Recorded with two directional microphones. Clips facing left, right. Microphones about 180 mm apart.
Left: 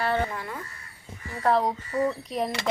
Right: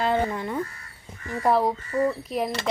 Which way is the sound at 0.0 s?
15° right (ahead or behind).